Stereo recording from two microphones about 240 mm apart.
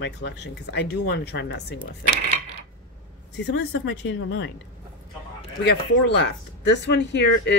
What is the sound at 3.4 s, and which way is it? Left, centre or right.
Speech, left.